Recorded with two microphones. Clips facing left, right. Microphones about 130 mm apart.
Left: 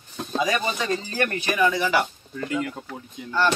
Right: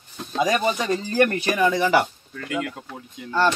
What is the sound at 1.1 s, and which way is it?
Speech, 35° right (ahead or behind).